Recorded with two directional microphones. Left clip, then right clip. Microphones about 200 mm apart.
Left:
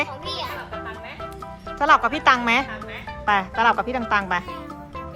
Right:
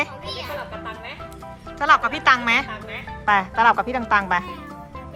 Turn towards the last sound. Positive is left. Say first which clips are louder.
# right 2 dB
turn(degrees=10)  # may be behind; listen again after turning